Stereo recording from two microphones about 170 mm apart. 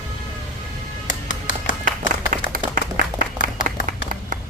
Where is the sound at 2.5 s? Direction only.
55° right (ahead or behind).